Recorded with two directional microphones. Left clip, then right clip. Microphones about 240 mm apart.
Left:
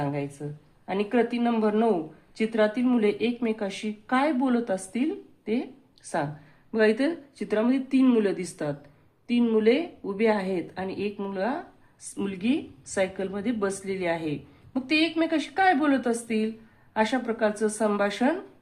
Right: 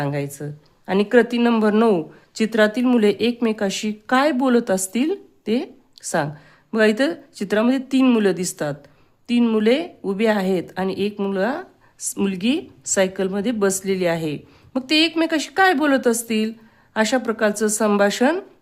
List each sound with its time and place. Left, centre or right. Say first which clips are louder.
0.0 s speech: right 5 dB; right